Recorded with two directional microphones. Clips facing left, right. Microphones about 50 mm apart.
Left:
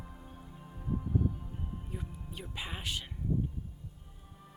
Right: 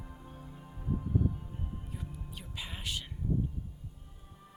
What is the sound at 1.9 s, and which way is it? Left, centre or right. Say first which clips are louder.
Music: left 1 dB; centre.